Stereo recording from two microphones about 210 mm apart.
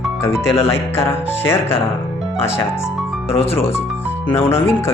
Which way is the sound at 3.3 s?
30° left (ahead or behind).